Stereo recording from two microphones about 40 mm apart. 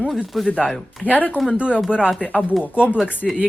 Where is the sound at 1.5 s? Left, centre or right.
Right.